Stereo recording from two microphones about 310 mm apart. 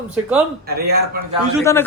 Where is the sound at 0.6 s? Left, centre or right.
Right.